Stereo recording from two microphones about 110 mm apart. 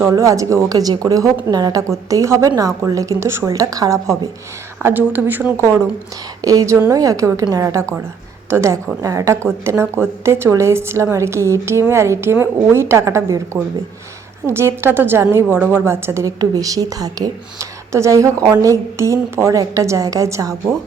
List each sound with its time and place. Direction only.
0.0 s a woman's voice: 25° right (ahead or behind)